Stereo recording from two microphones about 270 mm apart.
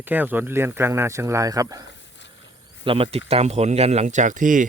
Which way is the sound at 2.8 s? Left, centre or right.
Centre.